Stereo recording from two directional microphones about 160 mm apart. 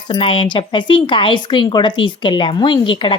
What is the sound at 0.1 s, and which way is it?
A woman's voice, 35° left (ahead or behind).